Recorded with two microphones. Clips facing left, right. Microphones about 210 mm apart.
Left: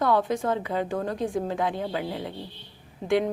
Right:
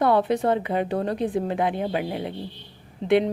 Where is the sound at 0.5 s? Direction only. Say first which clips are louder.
Right 3 dB; 20° right (ahead or behind).